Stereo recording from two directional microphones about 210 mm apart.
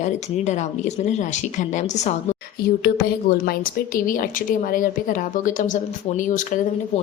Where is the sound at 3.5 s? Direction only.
40° left (ahead or behind).